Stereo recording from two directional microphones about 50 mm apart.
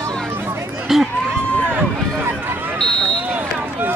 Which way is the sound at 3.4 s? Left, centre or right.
Right.